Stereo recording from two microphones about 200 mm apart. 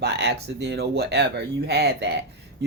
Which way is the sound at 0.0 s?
55° right (ahead or behind).